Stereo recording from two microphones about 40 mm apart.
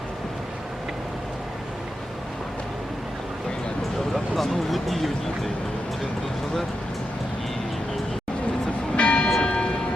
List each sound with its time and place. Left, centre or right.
4.1 s speech: centre
9.0 s church bell: left
9.4 s train: left